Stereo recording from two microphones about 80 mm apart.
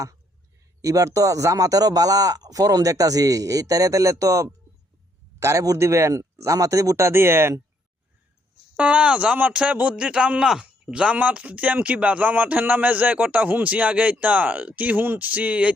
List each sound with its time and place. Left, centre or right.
0.8 s a man's voice: right
8.7 s a man's voice: centre